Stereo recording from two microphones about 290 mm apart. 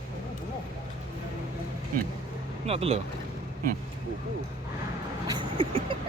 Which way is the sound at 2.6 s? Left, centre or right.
Right.